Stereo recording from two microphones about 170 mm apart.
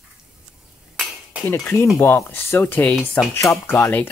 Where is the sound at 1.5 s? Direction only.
15° left (ahead or behind).